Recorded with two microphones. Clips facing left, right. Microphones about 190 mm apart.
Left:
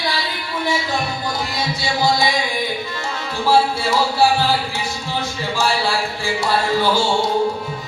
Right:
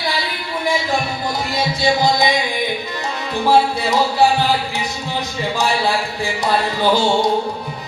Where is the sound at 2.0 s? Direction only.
20° right (ahead or behind).